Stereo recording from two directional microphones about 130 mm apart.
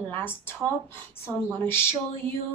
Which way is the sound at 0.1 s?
15° left (ahead or behind).